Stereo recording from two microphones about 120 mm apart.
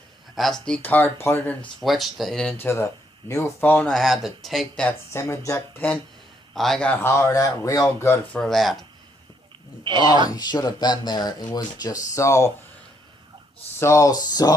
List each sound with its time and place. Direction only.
0.3 s speech: centre (ahead or behind)
1.8 s speech: centre (ahead or behind)
2.6 s speech: 20° left (ahead or behind); by 4.9 s centre (ahead or behind)
5.1 s speech: 25° left (ahead or behind)
6.5 s a man's voice: centre (ahead or behind)
7.0 s speech: 25° left (ahead or behind)
8.3 s speech: 5° left (ahead or behind)
9.8 s speech: 40° right (ahead or behind)
10.2 s speech: 35° left (ahead or behind)
13.7 s speech: 25° left (ahead or behind)